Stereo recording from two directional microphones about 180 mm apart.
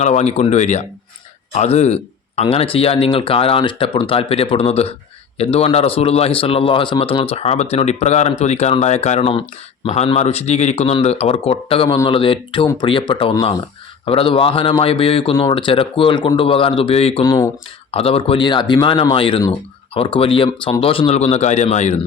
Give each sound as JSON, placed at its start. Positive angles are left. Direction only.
{"t": 0.0, "sound": "speech", "side_deg": 40}
{"t": 17.2, "sound": "speech", "side_deg": 20}
{"t": 17.9, "sound": "speech", "side_deg": 30}